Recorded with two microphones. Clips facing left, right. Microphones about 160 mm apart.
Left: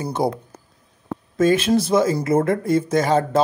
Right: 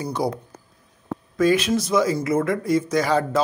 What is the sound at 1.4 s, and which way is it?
Speech, 30° left (ahead or behind).